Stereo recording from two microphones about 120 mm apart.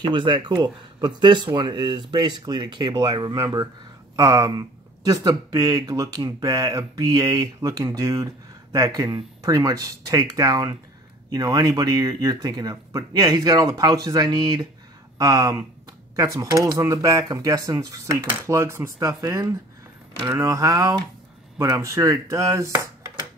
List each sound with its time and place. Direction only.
0.0 s speech: 45° right (ahead or behind); by 22.8 s 25° right (ahead or behind)